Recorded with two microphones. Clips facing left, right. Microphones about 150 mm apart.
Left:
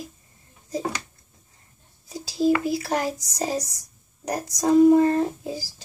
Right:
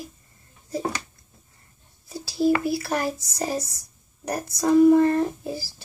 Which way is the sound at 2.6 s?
20° left (ahead or behind).